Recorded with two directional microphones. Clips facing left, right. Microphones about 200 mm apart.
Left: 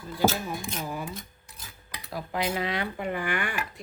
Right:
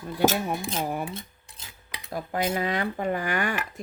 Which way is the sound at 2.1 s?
45° right (ahead or behind).